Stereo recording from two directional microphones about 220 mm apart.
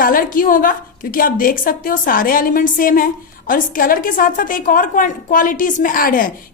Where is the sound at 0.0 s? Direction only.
40° left (ahead or behind).